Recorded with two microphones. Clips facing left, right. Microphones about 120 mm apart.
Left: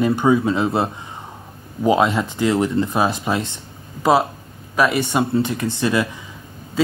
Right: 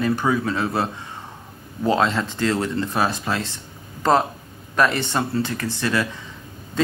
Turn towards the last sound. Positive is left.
turn(degrees=20)  # may be behind; listen again after turning